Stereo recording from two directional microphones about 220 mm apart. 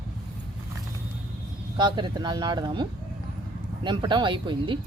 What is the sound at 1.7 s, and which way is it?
Speech, 20° right (ahead or behind).